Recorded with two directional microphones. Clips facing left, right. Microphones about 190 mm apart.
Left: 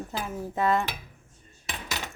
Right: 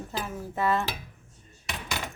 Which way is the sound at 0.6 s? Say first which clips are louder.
Left 2 dB; 15° left (ahead or behind).